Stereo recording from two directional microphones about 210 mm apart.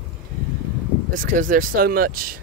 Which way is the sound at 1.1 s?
40° right (ahead or behind).